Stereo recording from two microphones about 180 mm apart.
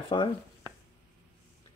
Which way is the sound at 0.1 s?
25° left (ahead or behind).